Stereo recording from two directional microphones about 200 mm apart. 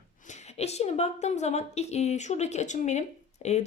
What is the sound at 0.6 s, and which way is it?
A woman's voice, 30° left (ahead or behind).